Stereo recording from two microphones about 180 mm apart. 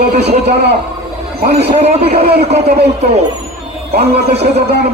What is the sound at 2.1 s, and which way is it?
Speech, 60° right (ahead or behind).